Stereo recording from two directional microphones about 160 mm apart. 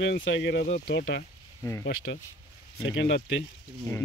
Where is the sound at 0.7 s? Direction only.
70° left (ahead or behind); by 1.2 s 90° left.